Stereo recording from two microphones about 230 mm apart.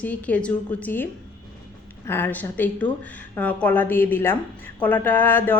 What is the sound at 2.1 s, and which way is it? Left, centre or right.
A woman's voice, centre.